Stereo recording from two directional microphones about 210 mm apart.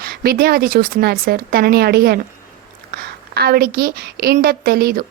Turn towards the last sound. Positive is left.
turn(degrees=-45)  # may be behind; listen again after turning